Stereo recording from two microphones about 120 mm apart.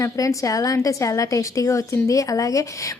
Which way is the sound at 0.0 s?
30° left (ahead or behind).